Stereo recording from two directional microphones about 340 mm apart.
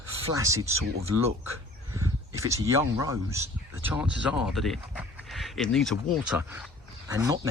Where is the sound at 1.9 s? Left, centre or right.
Centre.